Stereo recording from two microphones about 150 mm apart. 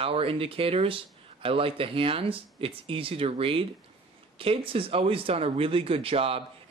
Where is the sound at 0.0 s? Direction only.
40° right (ahead or behind).